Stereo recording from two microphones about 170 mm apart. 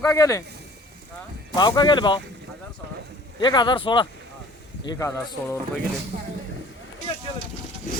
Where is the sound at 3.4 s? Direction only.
25° left (ahead or behind).